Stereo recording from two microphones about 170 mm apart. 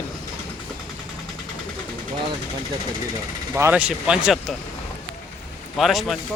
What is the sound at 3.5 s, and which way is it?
Speech, 15° right (ahead or behind).